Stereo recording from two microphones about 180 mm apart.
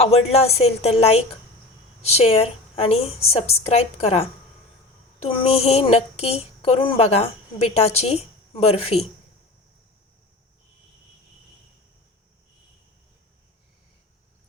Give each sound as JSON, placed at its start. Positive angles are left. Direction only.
{"t": 0.0, "sound": "speech", "side_deg": 35}